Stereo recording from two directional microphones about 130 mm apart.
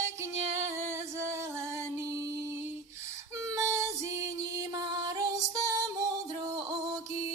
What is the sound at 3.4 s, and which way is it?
Music, 25° right (ahead or behind).